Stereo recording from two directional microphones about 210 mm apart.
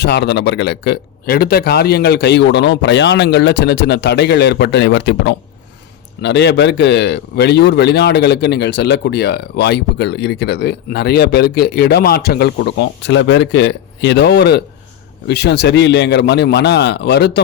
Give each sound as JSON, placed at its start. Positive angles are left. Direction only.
{"t": 0.0, "sound": "a man's voice", "side_deg": 55}